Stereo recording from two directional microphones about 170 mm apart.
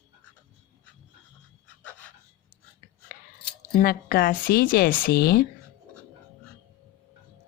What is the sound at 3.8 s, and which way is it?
Speech, 60° left (ahead or behind).